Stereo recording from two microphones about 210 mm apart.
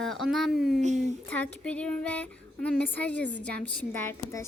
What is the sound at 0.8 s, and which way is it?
Speech, 35° right (ahead or behind).